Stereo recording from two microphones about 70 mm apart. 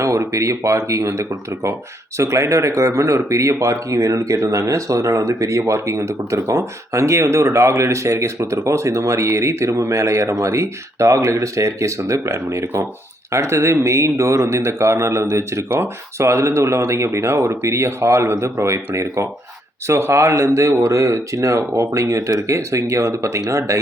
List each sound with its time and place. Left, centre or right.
0.0 s speech: right